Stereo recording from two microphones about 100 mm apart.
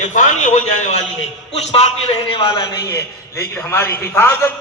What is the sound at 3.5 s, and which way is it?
Speech, 25° left (ahead or behind).